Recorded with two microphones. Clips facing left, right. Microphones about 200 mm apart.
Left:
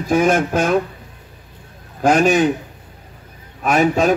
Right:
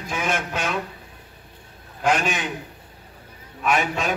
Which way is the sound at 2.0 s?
45° left (ahead or behind).